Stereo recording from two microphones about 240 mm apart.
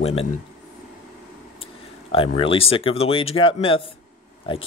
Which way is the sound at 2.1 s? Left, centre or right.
Left.